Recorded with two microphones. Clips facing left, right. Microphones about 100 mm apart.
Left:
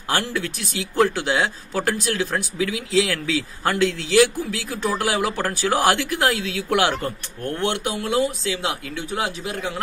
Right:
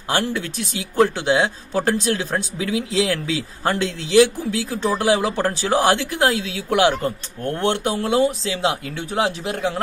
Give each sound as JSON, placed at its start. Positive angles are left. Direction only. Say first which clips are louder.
{"t": 0.1, "sound": "speech", "louder": "right 2 dB", "side_deg": -20}